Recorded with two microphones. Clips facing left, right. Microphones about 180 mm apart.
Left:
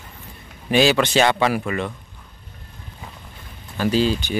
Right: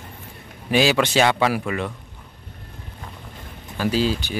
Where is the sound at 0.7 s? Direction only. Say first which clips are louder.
Left 2 dB; 10° right (ahead or behind).